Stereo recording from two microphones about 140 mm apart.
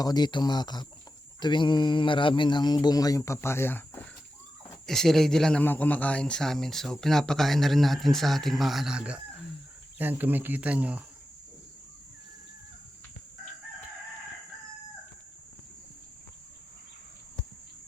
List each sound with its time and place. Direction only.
0.0 s speech: 30° left (ahead or behind); by 4.1 s 15° left (ahead or behind)
4.9 s speech: centre (ahead or behind)